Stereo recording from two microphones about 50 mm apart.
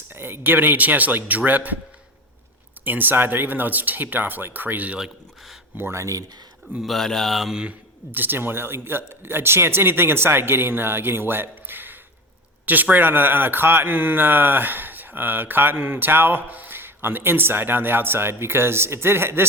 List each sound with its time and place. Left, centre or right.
0.1 s speech: right
2.8 s speech: right
5.9 s speech: right
6.8 s speech: centre
8.1 s speech: right